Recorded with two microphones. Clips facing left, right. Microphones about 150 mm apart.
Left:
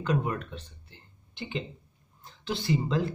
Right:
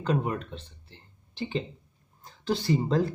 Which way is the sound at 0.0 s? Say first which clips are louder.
Right 1 dB; 25° right (ahead or behind).